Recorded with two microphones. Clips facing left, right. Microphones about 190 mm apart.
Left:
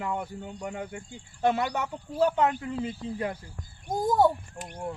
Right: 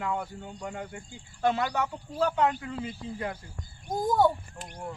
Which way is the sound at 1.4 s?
30° left (ahead or behind).